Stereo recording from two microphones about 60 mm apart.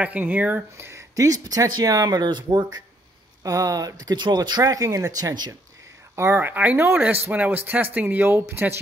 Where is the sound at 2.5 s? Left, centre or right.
Right.